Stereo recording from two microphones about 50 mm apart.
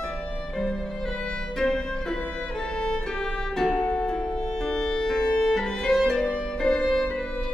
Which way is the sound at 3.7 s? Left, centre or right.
Centre.